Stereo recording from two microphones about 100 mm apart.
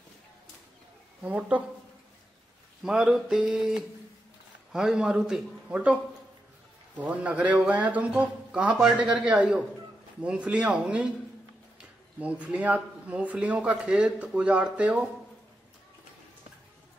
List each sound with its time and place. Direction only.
1.2 s speech: 15° right (ahead or behind)
2.8 s speech: 5° right (ahead or behind)
7.0 s speech: 15° right (ahead or behind)